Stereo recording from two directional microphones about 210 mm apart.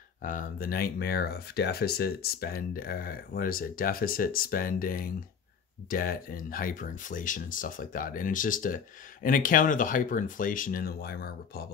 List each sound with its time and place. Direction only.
0.2 s speech: 40° left (ahead or behind)